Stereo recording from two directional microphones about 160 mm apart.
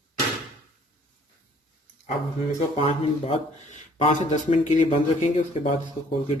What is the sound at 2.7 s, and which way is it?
Speech, 40° left (ahead or behind).